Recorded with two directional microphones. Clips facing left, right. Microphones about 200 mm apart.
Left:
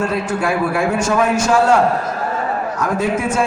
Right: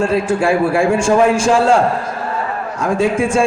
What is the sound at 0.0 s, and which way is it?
A man's voice, 30° right (ahead or behind).